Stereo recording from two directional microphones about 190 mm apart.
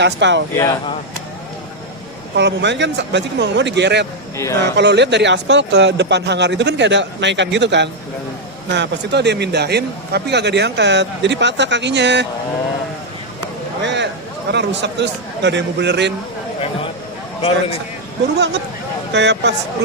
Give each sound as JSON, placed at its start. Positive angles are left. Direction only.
{"t": 0.0, "sound": "speech", "side_deg": -70}
{"t": 0.6, "sound": "speech", "side_deg": 20}
{"t": 2.3, "sound": "speech", "side_deg": -70}
{"t": 4.4, "sound": "speech", "side_deg": 15}
{"t": 4.8, "sound": "a man's voice", "side_deg": -65}
{"t": 13.8, "sound": "speech", "side_deg": -65}
{"t": 19.1, "sound": "a man's voice", "side_deg": -65}